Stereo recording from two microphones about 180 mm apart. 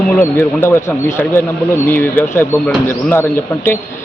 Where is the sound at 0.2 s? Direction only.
10° left (ahead or behind).